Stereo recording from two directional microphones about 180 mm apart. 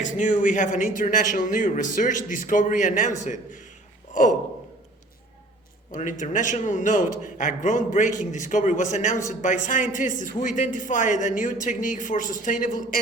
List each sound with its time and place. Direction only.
0.0 s a man's voice: 45° left (ahead or behind)
5.9 s a man's voice: 45° left (ahead or behind)